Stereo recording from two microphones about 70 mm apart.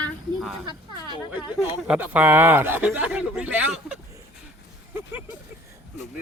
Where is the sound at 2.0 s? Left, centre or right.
Right.